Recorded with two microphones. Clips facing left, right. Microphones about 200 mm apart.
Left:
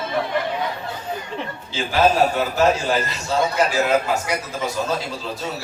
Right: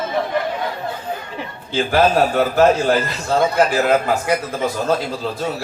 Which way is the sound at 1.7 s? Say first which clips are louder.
Right 2 dB; 55° right (ahead or behind).